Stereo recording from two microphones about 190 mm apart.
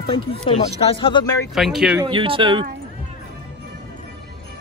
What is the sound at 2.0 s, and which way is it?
Speech, 25° right (ahead or behind).